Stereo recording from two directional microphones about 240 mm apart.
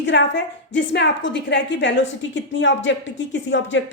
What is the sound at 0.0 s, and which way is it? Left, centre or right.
A woman's voice, left.